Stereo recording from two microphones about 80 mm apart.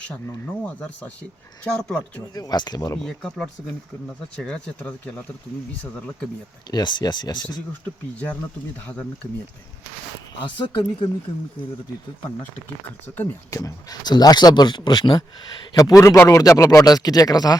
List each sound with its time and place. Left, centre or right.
0.4 s speech: centre
2.3 s speech: left
3.0 s speech: centre
4.8 s speech: left
6.7 s speech: left
10.4 s speech: left
13.5 s speech: left
14.0 s speech: left
15.7 s speech: left